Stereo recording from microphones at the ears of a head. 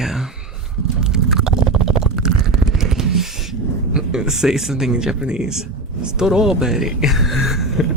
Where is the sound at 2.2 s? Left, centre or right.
Right.